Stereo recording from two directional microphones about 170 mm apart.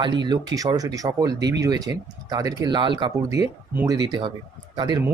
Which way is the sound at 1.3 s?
90° right.